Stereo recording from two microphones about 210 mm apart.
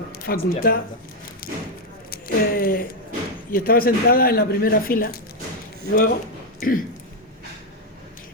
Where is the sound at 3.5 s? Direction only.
45° left (ahead or behind).